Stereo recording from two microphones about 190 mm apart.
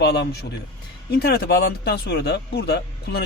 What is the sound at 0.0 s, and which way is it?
Speech, 60° left (ahead or behind).